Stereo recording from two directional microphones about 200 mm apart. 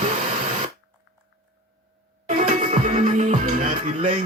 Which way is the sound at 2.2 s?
40° right (ahead or behind).